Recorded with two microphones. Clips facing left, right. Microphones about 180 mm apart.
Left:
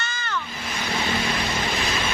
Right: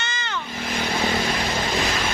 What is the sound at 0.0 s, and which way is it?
Vehicle, 20° right (ahead or behind).